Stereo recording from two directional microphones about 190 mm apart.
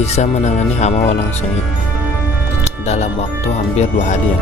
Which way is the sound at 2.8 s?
35° left (ahead or behind).